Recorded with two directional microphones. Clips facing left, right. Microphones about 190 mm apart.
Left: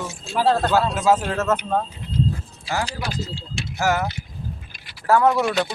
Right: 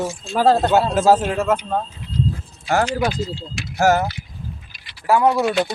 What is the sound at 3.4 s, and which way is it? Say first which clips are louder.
Speech: right 6 dB; 40° right (ahead or behind).